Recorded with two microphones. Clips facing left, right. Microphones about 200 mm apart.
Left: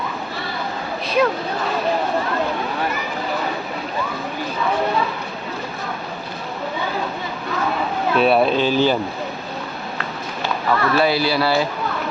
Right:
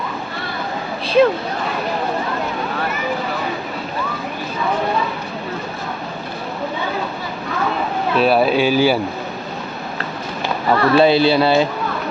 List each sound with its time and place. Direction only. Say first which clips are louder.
1.0 s speech: right 5 dB; 30° right (ahead or behind)
8.1 s speech: right 1 dB; centre (ahead or behind)
10.7 s speech: right 5 dB; 25° right (ahead or behind)